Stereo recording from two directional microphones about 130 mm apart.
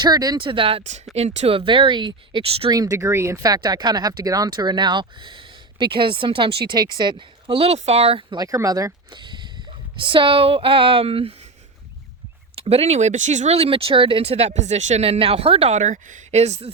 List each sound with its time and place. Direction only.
0.0 s a woman's voice: 30° right (ahead or behind)
1.1 s speech: 55° right (ahead or behind)
2.6 s a woman's voice: 30° right (ahead or behind); by 8.4 s 45° right (ahead or behind)
8.4 s speech: 25° right (ahead or behind); by 11.3 s 45° right (ahead or behind)
12.5 s speech: 50° right (ahead or behind)